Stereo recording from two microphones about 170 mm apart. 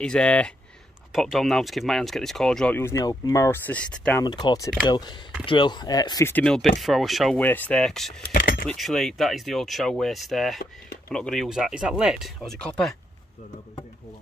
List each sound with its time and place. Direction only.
0.0 s speech: 5° left (ahead or behind)
4.2 s speech: 25° left (ahead or behind)
6.3 s speech: 5° left (ahead or behind)